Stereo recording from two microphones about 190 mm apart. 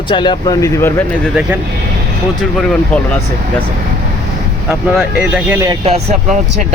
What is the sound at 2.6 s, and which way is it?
Speech, centre (ahead or behind).